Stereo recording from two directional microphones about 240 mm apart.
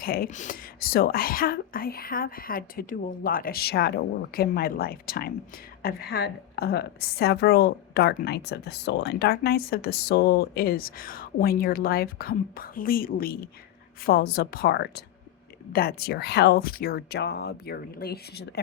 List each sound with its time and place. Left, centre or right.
0.0 s a woman's voice: left